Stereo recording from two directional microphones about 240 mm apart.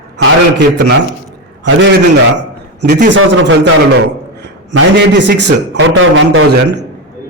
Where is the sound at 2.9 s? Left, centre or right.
Right.